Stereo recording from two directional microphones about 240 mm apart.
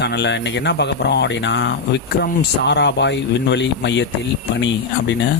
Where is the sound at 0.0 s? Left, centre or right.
Left.